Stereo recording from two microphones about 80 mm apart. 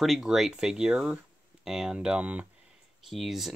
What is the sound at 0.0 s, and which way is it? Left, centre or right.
Speech, centre.